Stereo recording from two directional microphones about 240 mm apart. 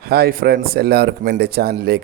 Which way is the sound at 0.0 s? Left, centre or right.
Right.